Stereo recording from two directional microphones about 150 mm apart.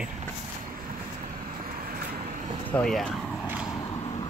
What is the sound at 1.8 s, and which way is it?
Vehicle, 75° right (ahead or behind).